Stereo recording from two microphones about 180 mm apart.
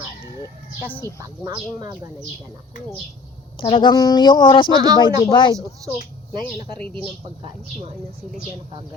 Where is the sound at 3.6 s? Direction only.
30° left (ahead or behind).